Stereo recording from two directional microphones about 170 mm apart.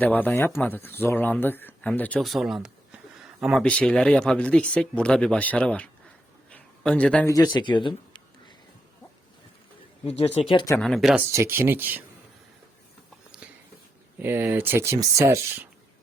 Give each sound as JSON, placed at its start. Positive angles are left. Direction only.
{"t": 0.0, "sound": "speech", "side_deg": 10}
{"t": 6.5, "sound": "a sound", "side_deg": 10}
{"t": 7.3, "sound": "speech", "side_deg": 25}
{"t": 10.5, "sound": "speech", "side_deg": 25}
{"t": 10.8, "sound": "speech", "side_deg": 0}
{"t": 11.3, "sound": "speech", "side_deg": -15}
{"t": 13.4, "sound": "a sound", "side_deg": -10}
{"t": 14.2, "sound": "speech", "side_deg": -10}